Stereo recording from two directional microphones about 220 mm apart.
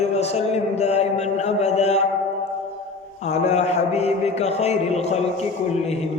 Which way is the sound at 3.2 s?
30° left (ahead or behind).